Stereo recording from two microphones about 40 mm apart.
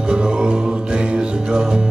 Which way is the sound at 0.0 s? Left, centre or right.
Centre.